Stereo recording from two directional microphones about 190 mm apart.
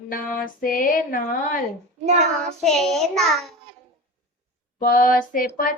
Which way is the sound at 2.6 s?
Centre (ahead or behind).